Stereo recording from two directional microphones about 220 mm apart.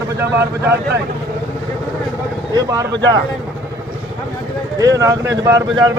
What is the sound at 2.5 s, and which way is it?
Speech, 15° right (ahead or behind).